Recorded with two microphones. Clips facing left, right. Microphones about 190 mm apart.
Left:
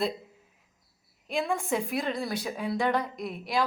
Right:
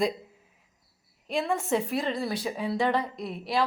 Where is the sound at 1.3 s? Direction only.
5° left (ahead or behind).